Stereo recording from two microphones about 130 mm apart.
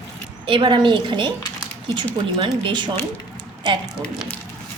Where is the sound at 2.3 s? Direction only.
35° right (ahead or behind).